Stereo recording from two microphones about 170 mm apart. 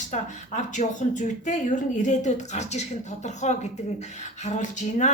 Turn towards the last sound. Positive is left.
turn(degrees=45)  # may be behind; listen again after turning